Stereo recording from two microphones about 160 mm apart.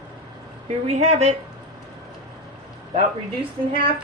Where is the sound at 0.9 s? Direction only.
45° right (ahead or behind).